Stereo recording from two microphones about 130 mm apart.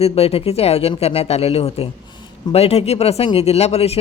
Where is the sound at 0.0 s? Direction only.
50° left (ahead or behind).